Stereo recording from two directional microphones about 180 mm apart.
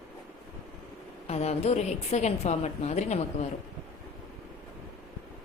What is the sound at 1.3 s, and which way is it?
A woman's voice, 35° left (ahead or behind).